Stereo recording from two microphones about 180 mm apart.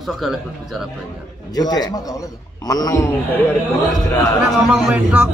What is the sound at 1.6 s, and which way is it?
Speech, 20° left (ahead or behind).